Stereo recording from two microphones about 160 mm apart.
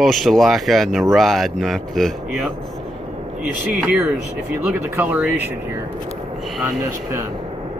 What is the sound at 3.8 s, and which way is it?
Speech, 10° right (ahead or behind).